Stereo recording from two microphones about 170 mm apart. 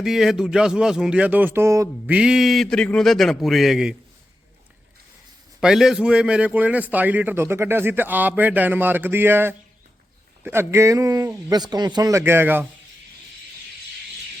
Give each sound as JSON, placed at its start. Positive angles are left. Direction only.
{"t": 0.0, "sound": "speech", "side_deg": 0}
{"t": 2.1, "sound": "speech", "side_deg": -5}
{"t": 5.5, "sound": "a man's voice", "side_deg": -5}